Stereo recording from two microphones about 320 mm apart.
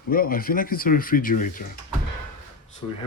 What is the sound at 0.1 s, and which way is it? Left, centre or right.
Speech, left.